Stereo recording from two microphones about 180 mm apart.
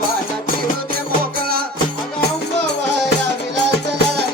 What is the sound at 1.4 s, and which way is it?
Music, 55° right (ahead or behind).